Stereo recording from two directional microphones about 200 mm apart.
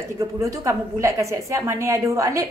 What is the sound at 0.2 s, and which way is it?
A woman's voice, 15° right (ahead or behind).